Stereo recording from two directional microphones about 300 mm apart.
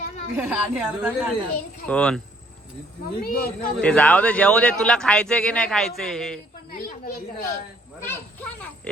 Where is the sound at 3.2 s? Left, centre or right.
Left.